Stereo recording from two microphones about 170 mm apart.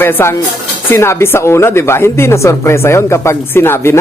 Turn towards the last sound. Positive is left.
turn(degrees=15)  # may be behind; listen again after turning